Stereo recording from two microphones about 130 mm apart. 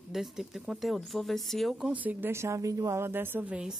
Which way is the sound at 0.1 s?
5° right (ahead or behind).